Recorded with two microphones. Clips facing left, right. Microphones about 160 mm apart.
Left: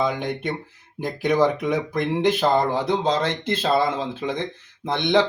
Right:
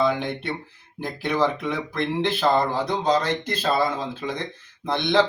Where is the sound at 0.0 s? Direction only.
15° left (ahead or behind).